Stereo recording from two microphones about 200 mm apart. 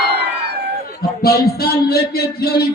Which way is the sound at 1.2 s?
50° left (ahead or behind).